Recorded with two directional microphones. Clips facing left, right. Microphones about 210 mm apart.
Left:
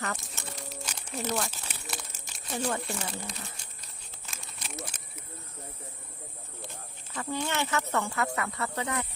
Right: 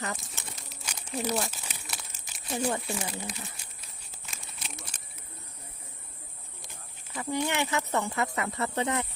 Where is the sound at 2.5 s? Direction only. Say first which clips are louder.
Right 2 dB; 15° right (ahead or behind).